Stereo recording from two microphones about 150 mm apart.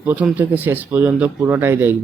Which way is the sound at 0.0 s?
10° right (ahead or behind).